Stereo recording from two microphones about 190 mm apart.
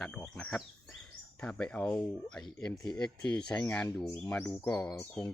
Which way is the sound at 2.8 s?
20° left (ahead or behind).